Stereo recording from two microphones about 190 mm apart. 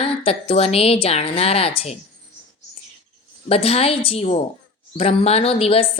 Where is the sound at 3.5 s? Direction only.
30° left (ahead or behind).